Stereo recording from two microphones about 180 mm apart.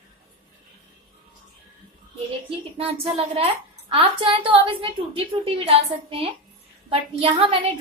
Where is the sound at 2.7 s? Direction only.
35° right (ahead or behind).